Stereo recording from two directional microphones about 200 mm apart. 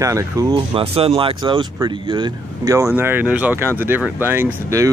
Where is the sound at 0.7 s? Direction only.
30° right (ahead or behind).